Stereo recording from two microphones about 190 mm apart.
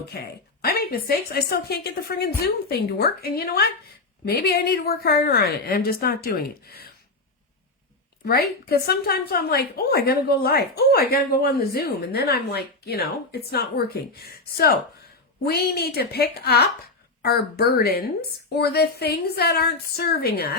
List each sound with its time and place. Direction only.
0.1 s a woman's voice: 55° left (ahead or behind)
8.2 s a woman's voice: 55° left (ahead or behind)